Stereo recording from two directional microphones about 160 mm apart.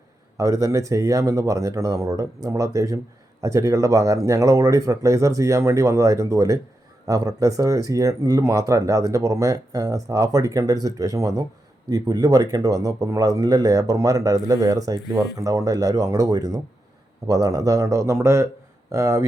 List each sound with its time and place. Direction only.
0.3 s speech: 20° right (ahead or behind)